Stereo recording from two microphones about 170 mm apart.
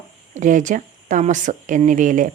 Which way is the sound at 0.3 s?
50° right (ahead or behind).